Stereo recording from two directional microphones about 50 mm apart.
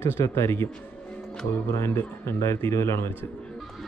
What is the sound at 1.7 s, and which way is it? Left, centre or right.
Speech, left.